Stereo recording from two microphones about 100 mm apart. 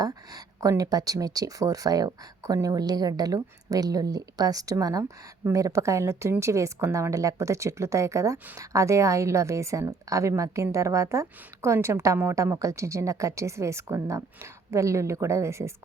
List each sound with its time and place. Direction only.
0.0 s a woman's voice: 40° right (ahead or behind)